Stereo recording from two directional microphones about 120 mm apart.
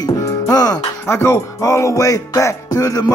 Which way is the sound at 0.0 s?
30° left (ahead or behind).